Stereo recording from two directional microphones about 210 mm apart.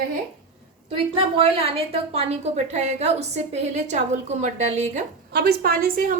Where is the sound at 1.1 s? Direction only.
25° right (ahead or behind).